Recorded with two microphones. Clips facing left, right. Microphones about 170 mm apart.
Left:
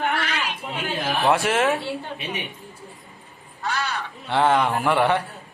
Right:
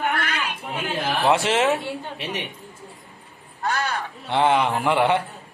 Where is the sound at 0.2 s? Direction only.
55° right (ahead or behind).